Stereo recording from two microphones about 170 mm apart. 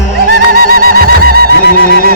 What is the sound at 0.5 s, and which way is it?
Music, 60° right (ahead or behind).